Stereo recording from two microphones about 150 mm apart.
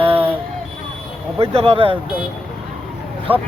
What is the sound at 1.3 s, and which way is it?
Speech, 40° right (ahead or behind).